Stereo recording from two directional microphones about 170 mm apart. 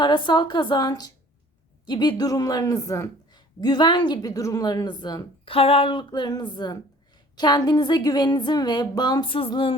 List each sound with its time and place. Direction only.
0.0 s a woman's voice: 25° left (ahead or behind)